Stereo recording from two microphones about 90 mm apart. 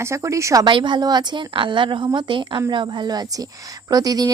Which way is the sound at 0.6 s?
60° right (ahead or behind).